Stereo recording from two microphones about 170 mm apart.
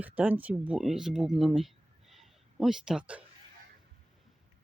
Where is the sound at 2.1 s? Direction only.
Centre (ahead or behind).